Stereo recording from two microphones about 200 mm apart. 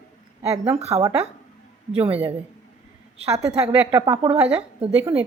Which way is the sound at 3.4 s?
15° right (ahead or behind).